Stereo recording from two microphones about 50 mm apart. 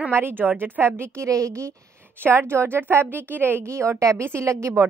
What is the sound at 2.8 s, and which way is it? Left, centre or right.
Speech, right.